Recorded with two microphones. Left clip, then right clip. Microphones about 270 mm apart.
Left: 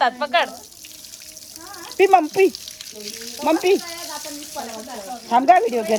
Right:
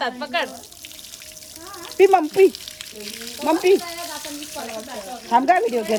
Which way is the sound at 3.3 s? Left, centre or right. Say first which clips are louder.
Even; left.